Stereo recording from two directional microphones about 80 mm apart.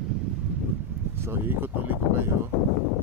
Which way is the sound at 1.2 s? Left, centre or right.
Right.